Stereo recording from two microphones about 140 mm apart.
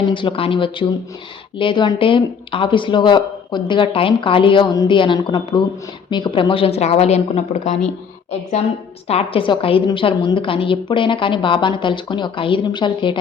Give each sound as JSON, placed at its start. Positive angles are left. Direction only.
{"t": 0.1, "sound": "speech", "side_deg": 35}